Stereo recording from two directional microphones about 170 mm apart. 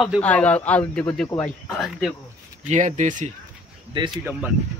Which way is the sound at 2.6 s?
45° right (ahead or behind).